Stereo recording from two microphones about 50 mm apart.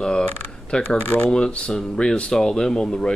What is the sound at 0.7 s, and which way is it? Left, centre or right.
Speech, centre.